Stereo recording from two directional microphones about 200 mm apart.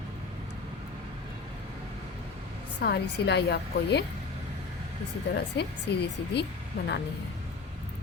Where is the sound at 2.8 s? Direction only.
55° left (ahead or behind).